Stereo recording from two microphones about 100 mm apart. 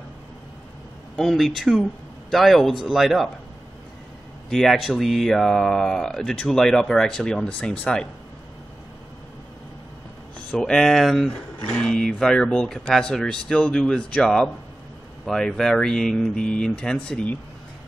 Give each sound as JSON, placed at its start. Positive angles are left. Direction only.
{"t": 1.1, "sound": "speech", "side_deg": 0}
{"t": 4.5, "sound": "speech", "side_deg": 5}
{"t": 10.5, "sound": "speech", "side_deg": 5}